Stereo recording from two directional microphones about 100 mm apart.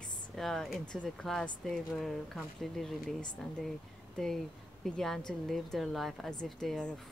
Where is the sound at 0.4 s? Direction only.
5° left (ahead or behind).